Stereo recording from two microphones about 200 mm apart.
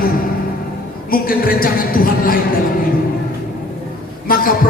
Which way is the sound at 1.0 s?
45° left (ahead or behind).